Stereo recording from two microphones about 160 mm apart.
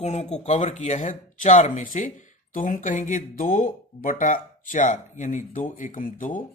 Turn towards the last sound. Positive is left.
turn(degrees=55)  # may be behind; listen again after turning